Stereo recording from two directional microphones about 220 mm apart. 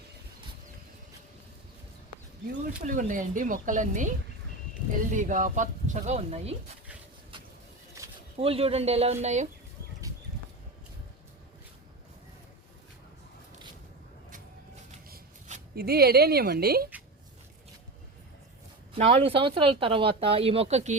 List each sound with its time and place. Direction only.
2.8 s speech: 35° right (ahead or behind)
5.1 s speech: 35° right (ahead or behind)
8.4 s speech: 25° right (ahead or behind)
10.0 s a sound: 15° right (ahead or behind)
15.1 s speech: 40° right (ahead or behind)
18.9 s speech: 30° right (ahead or behind)